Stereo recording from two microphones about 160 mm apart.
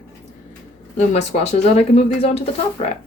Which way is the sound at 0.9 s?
45° left (ahead or behind).